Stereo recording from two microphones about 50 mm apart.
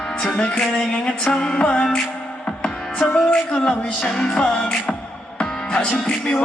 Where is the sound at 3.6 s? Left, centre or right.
Centre.